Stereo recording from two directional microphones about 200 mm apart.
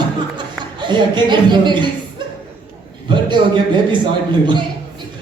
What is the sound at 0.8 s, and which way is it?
A man's voice, 25° right (ahead or behind).